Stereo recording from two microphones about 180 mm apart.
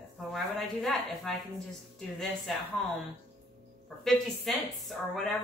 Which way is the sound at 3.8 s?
Centre (ahead or behind).